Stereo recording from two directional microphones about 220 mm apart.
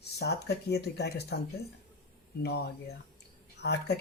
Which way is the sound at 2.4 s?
45° left (ahead or behind).